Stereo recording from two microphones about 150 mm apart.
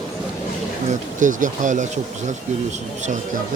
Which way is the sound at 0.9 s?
60° right (ahead or behind).